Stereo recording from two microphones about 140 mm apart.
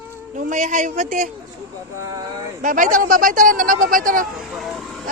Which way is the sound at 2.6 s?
70° right (ahead or behind).